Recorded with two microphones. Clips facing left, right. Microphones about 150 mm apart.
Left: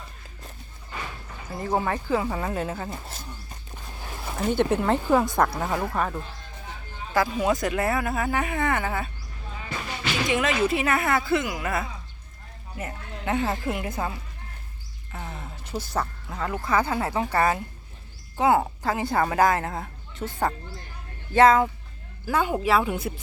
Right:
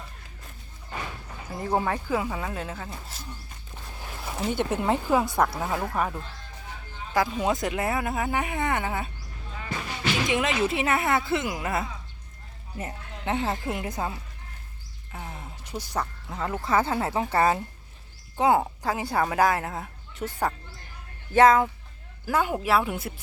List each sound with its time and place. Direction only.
1.5 s a woman's voice: 15° right (ahead or behind); by 2.9 s 5° left (ahead or behind)
4.5 s a woman's voice: 10° right (ahead or behind)
7.1 s speech: 20° right (ahead or behind)
10.2 s speech: 20° right (ahead or behind)
15.1 s a sound: 10° right (ahead or behind)
15.8 s a woman's voice: 15° right (ahead or behind)